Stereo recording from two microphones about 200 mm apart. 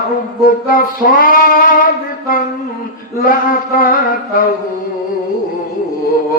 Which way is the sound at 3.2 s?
45° left (ahead or behind).